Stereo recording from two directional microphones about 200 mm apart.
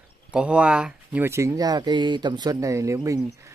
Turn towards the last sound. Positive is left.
turn(degrees=-15)  # may be behind; listen again after turning